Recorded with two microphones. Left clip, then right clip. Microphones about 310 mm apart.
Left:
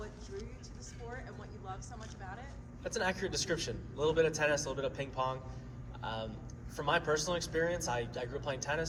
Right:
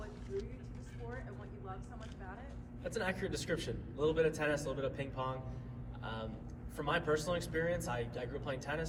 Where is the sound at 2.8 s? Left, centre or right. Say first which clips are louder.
Left 3 dB; left.